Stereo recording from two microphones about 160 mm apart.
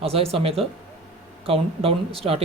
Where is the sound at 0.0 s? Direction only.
35° right (ahead or behind).